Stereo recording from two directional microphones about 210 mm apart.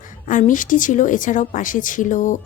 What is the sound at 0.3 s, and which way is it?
A woman's voice, 40° left (ahead or behind).